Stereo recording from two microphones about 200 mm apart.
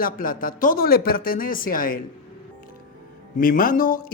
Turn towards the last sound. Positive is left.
turn(degrees=45)  # may be behind; listen again after turning